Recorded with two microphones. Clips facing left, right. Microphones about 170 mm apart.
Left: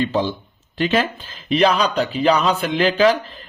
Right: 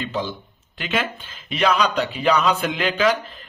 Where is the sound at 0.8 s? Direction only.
35° left (ahead or behind).